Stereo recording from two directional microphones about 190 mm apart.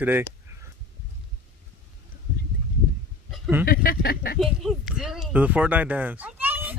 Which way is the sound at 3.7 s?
50° left (ahead or behind).